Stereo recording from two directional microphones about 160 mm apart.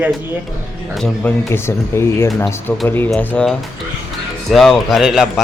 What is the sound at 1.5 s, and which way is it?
Speech, 15° left (ahead or behind).